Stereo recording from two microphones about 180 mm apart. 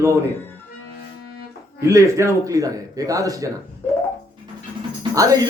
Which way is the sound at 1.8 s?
15° right (ahead or behind).